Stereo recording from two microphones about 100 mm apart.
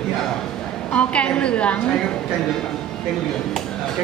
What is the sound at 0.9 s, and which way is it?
Speech, 10° left (ahead or behind).